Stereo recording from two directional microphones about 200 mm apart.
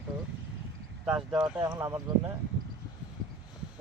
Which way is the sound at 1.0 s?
5° right (ahead or behind).